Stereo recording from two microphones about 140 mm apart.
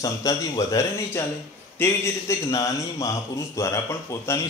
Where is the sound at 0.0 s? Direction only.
25° left (ahead or behind).